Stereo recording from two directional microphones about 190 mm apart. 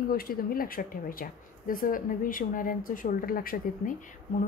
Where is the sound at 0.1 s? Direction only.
50° left (ahead or behind).